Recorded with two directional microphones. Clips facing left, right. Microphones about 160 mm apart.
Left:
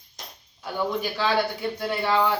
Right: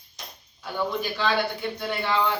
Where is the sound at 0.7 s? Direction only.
5° left (ahead or behind).